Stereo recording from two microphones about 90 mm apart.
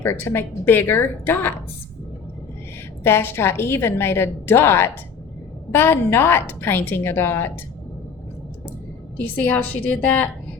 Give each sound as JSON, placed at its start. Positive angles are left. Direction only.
{"t": 0.0, "sound": "a woman's voice", "side_deg": 25}
{"t": 3.0, "sound": "a woman's voice", "side_deg": 25}
{"t": 9.1, "sound": "a woman's voice", "side_deg": 20}